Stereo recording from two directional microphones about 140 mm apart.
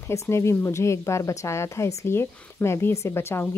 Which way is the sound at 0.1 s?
20° left (ahead or behind).